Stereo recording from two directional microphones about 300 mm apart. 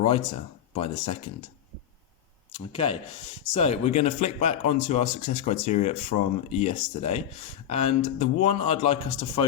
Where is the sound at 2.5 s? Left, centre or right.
Centre.